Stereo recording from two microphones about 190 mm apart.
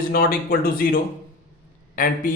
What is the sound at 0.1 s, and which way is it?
A man's voice, 50° left (ahead or behind).